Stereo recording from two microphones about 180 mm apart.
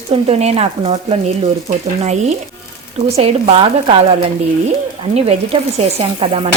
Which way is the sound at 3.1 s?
35° right (ahead or behind).